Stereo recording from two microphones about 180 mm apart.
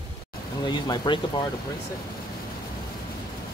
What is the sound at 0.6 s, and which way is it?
Speech, 25° left (ahead or behind).